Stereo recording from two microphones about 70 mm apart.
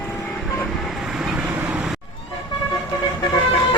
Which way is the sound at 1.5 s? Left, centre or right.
Right.